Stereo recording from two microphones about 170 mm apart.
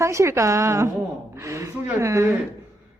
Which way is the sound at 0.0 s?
15° right (ahead or behind).